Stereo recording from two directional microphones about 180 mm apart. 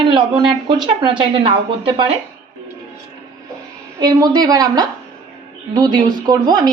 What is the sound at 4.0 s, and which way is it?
A woman's voice, 25° right (ahead or behind).